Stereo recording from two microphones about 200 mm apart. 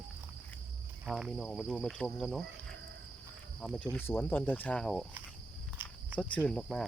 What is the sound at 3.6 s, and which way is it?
Speech, 5° left (ahead or behind).